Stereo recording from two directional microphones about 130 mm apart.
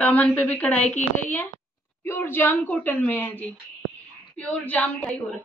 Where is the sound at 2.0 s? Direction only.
15° left (ahead or behind).